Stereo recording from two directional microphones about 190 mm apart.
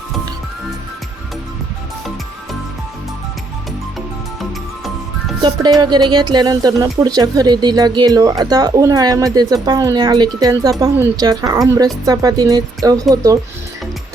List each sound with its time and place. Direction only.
5.8 s speech: 20° right (ahead or behind)